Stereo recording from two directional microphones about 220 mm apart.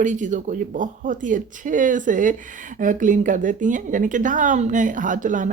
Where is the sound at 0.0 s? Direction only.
35° right (ahead or behind).